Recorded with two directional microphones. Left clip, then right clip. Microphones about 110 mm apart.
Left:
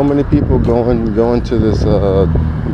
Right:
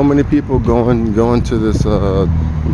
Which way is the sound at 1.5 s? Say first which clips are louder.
Left 2 dB; 35° right (ahead or behind).